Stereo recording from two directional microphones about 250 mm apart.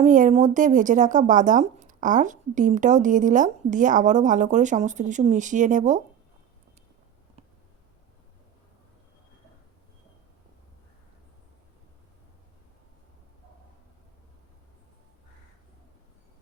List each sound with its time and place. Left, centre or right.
0.0 s speech: right